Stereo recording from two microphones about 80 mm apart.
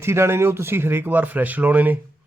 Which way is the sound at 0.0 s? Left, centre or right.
Right.